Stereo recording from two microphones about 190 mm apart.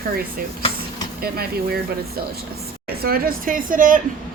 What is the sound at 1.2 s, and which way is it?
Speech, 55° right (ahead or behind).